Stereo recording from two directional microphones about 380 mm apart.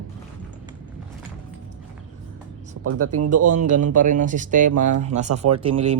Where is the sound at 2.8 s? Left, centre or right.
Right.